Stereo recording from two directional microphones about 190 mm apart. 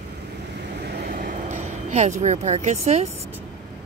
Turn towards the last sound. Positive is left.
turn(degrees=-35)  # may be behind; listen again after turning